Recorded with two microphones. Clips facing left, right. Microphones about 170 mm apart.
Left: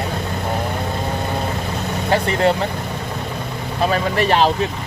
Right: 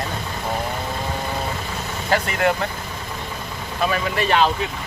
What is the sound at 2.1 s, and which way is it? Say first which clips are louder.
Speech: left 3 dB; 30° left (ahead or behind).